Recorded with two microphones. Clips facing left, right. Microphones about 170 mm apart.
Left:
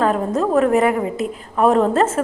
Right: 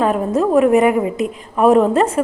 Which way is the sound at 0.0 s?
5° right (ahead or behind).